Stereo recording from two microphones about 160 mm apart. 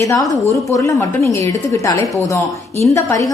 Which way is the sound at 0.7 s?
20° left (ahead or behind).